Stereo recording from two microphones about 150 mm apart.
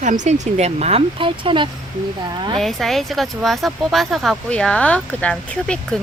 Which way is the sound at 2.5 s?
Centre (ahead or behind).